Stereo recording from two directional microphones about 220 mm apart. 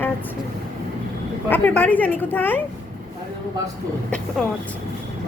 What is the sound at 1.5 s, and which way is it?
A woman's voice, 10° left (ahead or behind).